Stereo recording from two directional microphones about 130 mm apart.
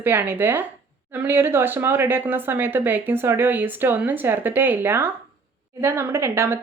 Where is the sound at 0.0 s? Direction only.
15° right (ahead or behind).